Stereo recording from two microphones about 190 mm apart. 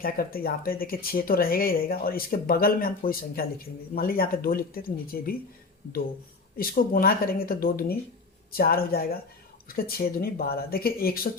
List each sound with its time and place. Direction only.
0.0 s speech: 50° left (ahead or behind)
6.6 s speech: 50° left (ahead or behind)